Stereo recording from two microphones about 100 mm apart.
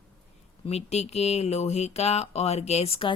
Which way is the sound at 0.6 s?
90° left.